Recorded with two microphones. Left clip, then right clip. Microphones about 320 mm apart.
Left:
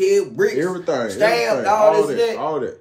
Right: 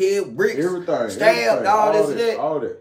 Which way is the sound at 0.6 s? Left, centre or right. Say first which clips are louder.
Even; left.